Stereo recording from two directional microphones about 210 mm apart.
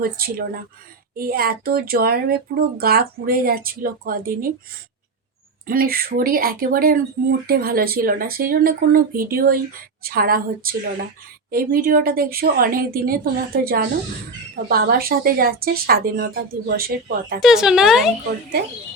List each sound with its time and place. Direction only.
0.0 s speech: 45° right (ahead or behind)
5.6 s speech: 45° right (ahead or behind)
17.4 s speech: 5° right (ahead or behind)